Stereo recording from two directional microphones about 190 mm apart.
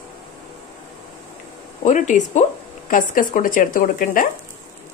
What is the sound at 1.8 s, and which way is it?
A woman's voice, 40° left (ahead or behind).